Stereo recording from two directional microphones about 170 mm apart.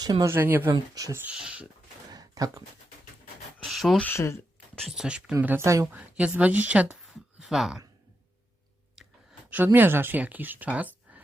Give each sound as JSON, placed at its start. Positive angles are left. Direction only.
{"t": 0.0, "sound": "speech", "side_deg": -25}
{"t": 2.0, "sound": "a sound", "side_deg": -20}
{"t": 3.6, "sound": "speech", "side_deg": 0}
{"t": 4.9, "sound": "speech", "side_deg": -5}
{"t": 9.7, "sound": "speech", "side_deg": -10}